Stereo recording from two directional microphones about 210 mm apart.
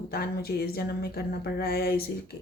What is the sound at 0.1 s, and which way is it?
Speech, 45° left (ahead or behind).